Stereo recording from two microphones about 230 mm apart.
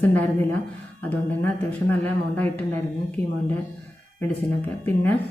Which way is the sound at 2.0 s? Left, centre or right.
Centre.